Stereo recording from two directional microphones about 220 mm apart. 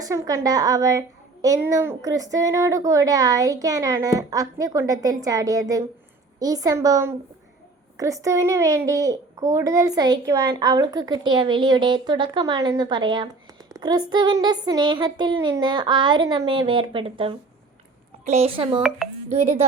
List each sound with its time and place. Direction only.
0.0 s a woman's voice: 15° right (ahead or behind)
18.8 s speech: 5° right (ahead or behind)
19.3 s speech: 30° right (ahead or behind)